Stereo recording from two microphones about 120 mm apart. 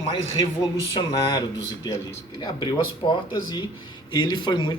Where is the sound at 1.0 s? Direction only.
35° left (ahead or behind).